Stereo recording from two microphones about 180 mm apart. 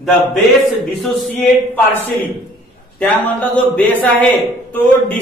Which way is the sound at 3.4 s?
10° left (ahead or behind).